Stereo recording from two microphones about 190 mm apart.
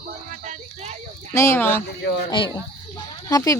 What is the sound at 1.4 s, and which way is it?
Speech, 15° left (ahead or behind).